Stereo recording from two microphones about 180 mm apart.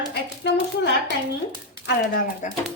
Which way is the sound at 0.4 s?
75° left (ahead or behind).